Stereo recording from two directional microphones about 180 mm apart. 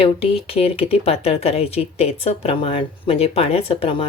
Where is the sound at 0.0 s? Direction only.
30° left (ahead or behind).